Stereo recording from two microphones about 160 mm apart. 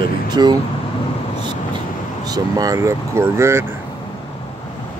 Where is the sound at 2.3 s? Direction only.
20° right (ahead or behind).